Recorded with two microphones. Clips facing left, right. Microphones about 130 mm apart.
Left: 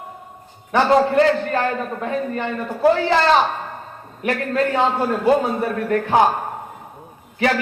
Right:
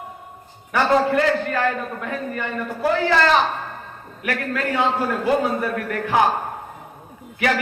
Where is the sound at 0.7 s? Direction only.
30° left (ahead or behind).